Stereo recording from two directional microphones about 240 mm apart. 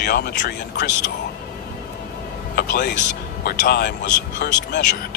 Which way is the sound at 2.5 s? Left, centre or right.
Left.